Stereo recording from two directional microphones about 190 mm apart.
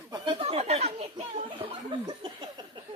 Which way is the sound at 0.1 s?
25° right (ahead or behind).